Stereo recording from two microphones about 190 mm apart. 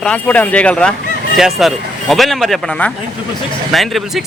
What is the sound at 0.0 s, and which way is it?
Speech, 5° left (ahead or behind).